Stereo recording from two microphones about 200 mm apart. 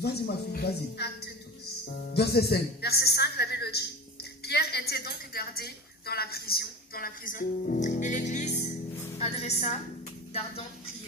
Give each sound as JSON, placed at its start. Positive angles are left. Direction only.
{"t": 0.0, "sound": "a woman's voice", "side_deg": 55}